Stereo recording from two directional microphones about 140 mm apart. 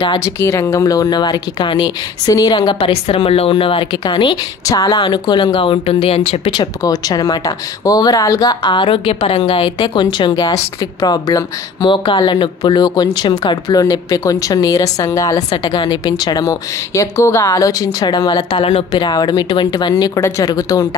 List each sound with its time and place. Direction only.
0.2 s speech: 20° left (ahead or behind); by 6.6 s 45° left (ahead or behind)
6.6 s speech: 25° left (ahead or behind)